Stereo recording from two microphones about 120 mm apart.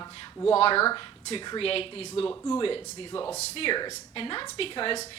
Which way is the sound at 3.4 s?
50° left (ahead or behind).